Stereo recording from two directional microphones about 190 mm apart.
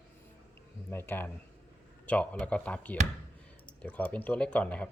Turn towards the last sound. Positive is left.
turn(degrees=5)  # may be behind; listen again after turning